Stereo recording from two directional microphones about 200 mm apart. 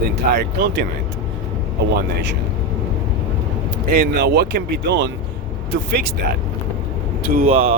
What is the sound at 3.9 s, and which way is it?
Speech, 50° right (ahead or behind).